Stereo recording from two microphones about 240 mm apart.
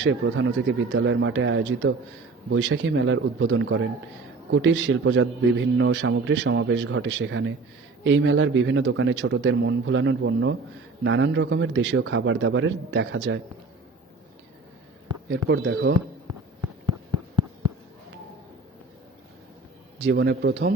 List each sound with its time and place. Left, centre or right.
0.0 s a man's voice: right
15.3 s a man's voice: right
20.0 s a man's voice: right